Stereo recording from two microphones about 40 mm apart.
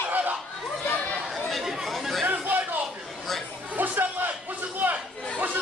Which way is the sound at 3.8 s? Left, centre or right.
Right.